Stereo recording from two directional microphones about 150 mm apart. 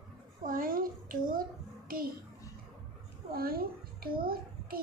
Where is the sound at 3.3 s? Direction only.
85° right.